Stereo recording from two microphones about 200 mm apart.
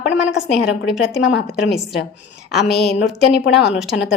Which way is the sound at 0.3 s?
65° left (ahead or behind).